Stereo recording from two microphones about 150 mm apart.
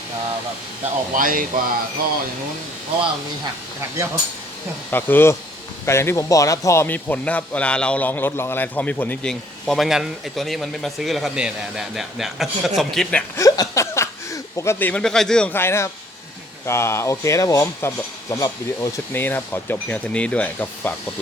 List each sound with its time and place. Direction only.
1.1 s speech: 65° right (ahead or behind)
3.8 s speech: 20° right (ahead or behind)
4.9 s speech: 15° left (ahead or behind)
13.3 s speech: 20° left (ahead or behind)